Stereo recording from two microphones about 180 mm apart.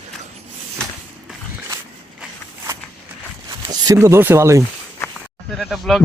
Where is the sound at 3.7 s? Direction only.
15° right (ahead or behind).